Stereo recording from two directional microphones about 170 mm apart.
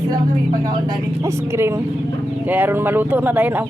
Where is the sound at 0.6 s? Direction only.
25° right (ahead or behind).